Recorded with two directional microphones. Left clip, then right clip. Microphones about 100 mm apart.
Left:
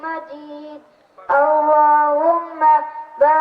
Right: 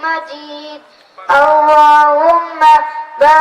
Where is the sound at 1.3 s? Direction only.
30° right (ahead or behind).